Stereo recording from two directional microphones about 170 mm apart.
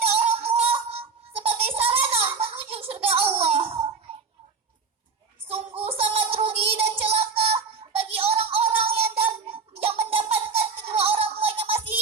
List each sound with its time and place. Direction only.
0.1 s music: 35° right (ahead or behind)
5.5 s child singing: 35° right (ahead or behind)
8.9 s a sound: 35° right (ahead or behind)